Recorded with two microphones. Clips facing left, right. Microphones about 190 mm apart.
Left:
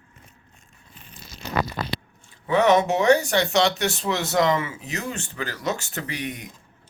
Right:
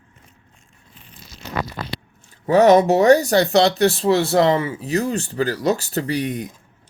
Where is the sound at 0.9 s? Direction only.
50° left (ahead or behind).